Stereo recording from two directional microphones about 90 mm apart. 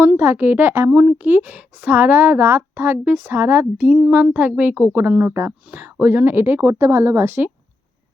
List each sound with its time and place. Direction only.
0.2 s speech: 20° right (ahead or behind)